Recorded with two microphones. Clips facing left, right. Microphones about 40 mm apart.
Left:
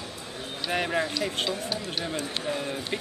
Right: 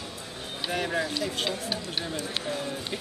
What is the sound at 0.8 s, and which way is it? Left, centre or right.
Speech, centre.